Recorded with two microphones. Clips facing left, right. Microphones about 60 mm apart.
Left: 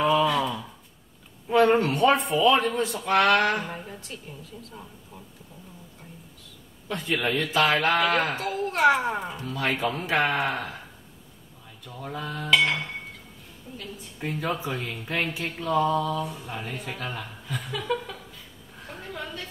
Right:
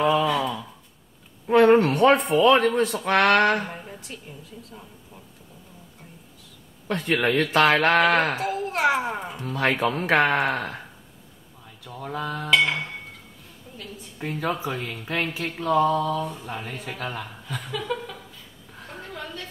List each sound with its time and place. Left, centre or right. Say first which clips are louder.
0.0 s a sound: right 1 dB; centre
1.5 s a man's voice: right 4 dB; right
6.9 s a man's voice: right 4 dB; right
8.4 s a child's voice: even; centre
9.0 s a woman's voice: left 1 dB; centre
9.4 s a man's voice: right 6 dB; right
12.2 s a woman's voice: right 1 dB; centre
14.3 s a woman's voice: right 2 dB; centre
18.9 s a sound: even; centre